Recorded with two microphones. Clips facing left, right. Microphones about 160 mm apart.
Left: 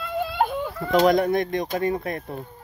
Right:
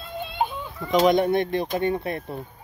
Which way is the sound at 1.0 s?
25° right (ahead or behind).